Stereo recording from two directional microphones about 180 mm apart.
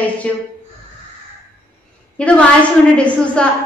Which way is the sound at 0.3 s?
5° left (ahead or behind).